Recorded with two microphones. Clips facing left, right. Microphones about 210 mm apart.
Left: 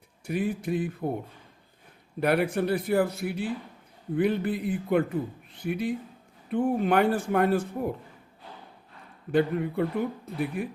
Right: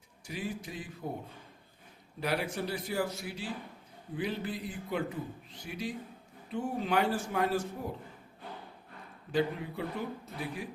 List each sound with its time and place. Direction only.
0.3 s a man's voice: 60° left (ahead or behind)
2.2 s a man's voice: 55° left (ahead or behind)
9.3 s a man's voice: 55° left (ahead or behind)